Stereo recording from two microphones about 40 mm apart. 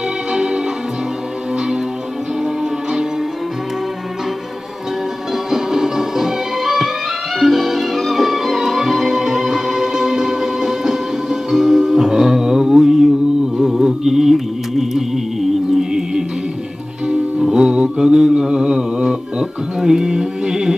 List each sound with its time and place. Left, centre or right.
5.5 s music: centre
17.1 s music: centre